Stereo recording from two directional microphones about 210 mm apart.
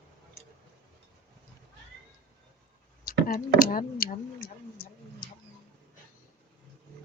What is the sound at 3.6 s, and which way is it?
Speech, 40° left (ahead or behind).